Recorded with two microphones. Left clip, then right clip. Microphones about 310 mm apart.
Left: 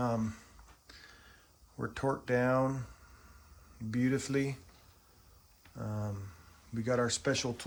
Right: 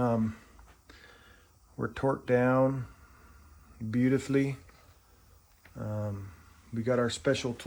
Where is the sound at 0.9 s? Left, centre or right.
Centre.